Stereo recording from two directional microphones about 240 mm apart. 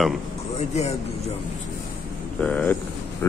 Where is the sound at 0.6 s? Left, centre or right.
Left.